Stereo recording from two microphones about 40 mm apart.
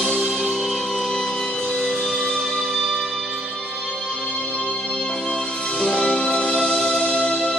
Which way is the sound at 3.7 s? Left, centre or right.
Left.